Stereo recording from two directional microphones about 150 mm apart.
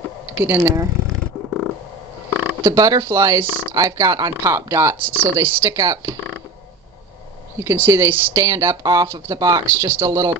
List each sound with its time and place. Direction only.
0.4 s speech: 15° right (ahead or behind)
2.4 s speech: 15° right (ahead or behind)
7.5 s speech: 15° right (ahead or behind)